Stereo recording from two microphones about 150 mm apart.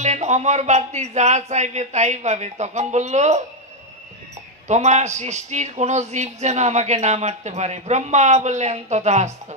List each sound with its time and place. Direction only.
0.0 s a man's voice: 50° right (ahead or behind)
4.6 s a man's voice: 50° right (ahead or behind)